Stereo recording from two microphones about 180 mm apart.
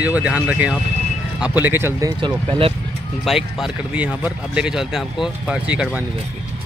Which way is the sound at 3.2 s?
Centre (ahead or behind).